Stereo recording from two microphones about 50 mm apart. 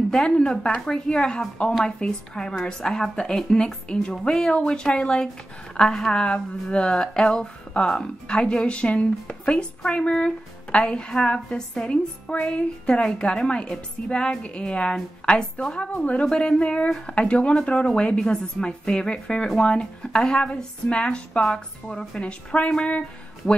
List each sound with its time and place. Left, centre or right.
0.1 s a woman's voice: centre
12.3 s a woman's voice: left
22.2 s a woman's voice: left